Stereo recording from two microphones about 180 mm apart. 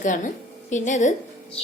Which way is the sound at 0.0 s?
45° left (ahead or behind).